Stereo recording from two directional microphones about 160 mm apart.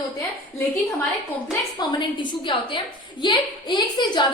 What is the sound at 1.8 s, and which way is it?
A woman's voice, 30° left (ahead or behind).